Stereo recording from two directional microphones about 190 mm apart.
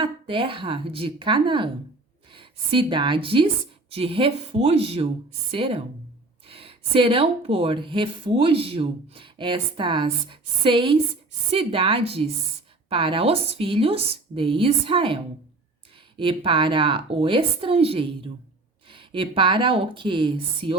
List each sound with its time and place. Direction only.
0.0 s a woman's voice: 25° right (ahead or behind)